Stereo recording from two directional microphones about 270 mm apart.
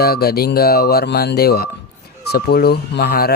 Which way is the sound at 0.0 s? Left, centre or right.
Left.